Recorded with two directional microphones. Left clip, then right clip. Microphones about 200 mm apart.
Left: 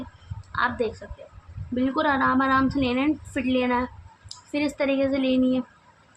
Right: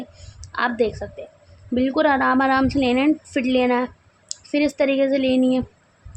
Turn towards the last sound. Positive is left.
turn(degrees=-25)  # may be behind; listen again after turning